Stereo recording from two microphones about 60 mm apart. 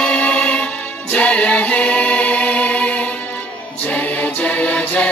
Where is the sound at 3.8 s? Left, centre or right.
Left.